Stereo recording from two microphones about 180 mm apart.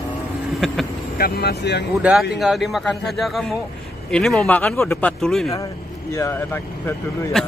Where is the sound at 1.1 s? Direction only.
60° left (ahead or behind).